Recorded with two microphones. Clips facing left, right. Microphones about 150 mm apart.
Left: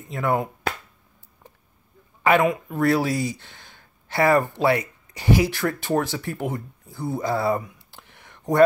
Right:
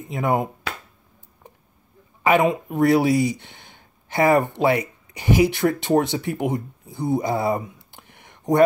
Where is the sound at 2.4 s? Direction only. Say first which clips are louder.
Right 2 dB; 20° right (ahead or behind).